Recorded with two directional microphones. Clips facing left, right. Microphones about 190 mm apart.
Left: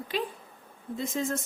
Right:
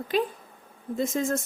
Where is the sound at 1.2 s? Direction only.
50° right (ahead or behind).